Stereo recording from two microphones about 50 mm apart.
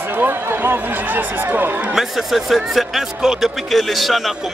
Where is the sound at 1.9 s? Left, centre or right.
Centre.